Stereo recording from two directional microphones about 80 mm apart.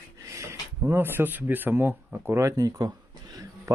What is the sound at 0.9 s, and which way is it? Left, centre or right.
Speech, right.